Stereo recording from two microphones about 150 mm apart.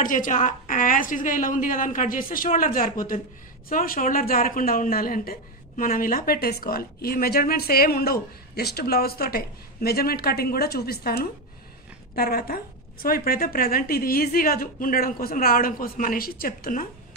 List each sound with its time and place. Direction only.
0.0 s a woman's voice: 60° left (ahead or behind); by 11.2 s 90° left
12.2 s a woman's voice: 80° left